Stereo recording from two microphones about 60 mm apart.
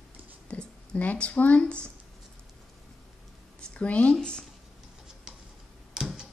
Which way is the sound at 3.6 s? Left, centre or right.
Centre.